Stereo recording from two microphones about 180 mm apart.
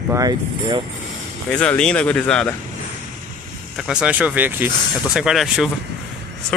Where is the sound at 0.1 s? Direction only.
20° right (ahead or behind).